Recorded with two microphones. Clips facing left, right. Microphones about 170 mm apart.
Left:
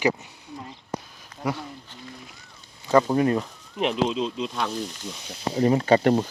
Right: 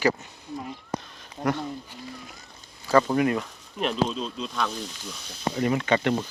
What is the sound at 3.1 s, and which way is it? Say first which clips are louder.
Speech: left 2 dB; 30° left (ahead or behind).